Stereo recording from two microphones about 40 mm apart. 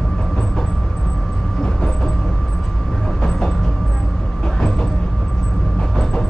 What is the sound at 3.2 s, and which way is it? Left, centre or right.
Vehicle, centre.